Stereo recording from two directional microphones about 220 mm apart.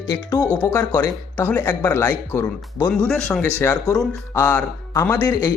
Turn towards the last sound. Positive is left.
turn(degrees=10)  # may be behind; listen again after turning